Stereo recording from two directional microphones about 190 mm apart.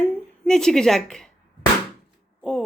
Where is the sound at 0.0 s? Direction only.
5° left (ahead or behind).